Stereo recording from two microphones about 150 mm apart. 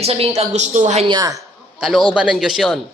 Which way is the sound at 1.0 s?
25° right (ahead or behind).